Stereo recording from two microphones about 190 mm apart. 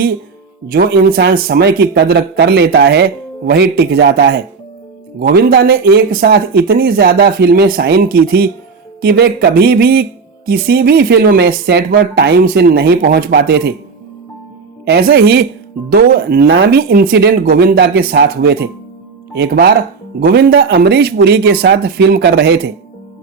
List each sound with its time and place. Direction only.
0.7 s a man's voice: 55° right (ahead or behind)
14.8 s a man's voice: 60° right (ahead or behind)